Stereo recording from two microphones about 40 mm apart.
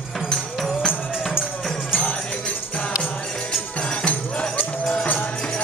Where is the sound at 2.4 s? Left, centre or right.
Left.